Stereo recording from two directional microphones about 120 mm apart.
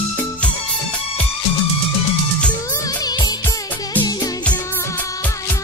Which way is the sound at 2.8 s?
35° left (ahead or behind).